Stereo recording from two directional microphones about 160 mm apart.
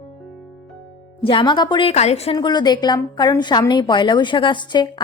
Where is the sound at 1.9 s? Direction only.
45° left (ahead or behind).